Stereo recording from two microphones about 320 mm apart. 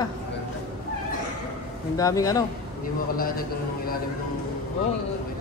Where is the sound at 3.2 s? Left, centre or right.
Left.